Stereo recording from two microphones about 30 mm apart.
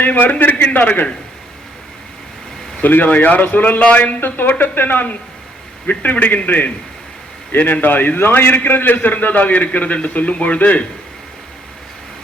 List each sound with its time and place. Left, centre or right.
0.0 s a man's voice: left
0.6 s speech: left
2.8 s speech: left
3.8 s a man's voice: left
4.4 s a man's voice: left
5.9 s a man's voice: left
9.2 s speech: left
9.6 s a man's voice: left